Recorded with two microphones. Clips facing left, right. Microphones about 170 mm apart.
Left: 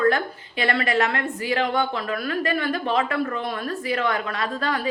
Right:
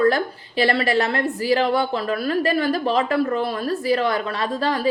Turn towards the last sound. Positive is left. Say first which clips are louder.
# right 3 dB
turn(degrees=-35)  # may be behind; listen again after turning